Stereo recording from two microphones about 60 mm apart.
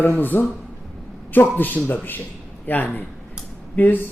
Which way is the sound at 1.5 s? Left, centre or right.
Left.